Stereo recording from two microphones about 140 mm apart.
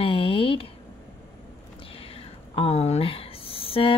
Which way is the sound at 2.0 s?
45° left (ahead or behind).